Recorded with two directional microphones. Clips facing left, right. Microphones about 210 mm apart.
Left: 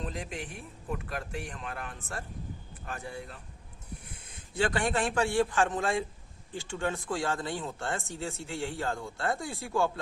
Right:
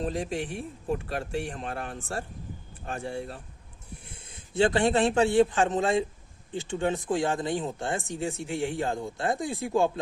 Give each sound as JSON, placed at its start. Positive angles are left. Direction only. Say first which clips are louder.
{"t": 0.0, "sound": "speech", "louder": "right 7 dB", "side_deg": -30}
{"t": 4.5, "sound": "speech", "louder": "right 6 dB", "side_deg": -25}